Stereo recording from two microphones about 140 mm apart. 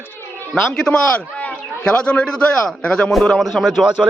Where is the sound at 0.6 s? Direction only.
5° left (ahead or behind).